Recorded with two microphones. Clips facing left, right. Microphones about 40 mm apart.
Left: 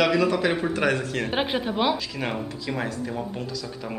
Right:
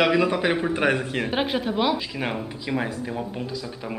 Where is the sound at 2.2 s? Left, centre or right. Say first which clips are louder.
Right 1 dB; centre.